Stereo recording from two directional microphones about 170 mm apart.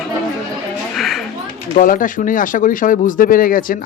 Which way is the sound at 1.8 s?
55° left (ahead or behind).